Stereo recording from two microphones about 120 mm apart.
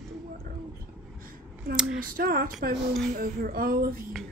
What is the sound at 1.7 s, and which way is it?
Speech, 5° right (ahead or behind).